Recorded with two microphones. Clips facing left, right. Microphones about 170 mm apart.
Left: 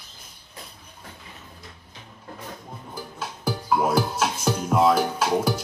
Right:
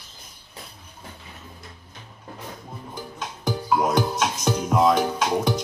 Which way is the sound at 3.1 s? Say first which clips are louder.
Right 1 dB; 5° left (ahead or behind).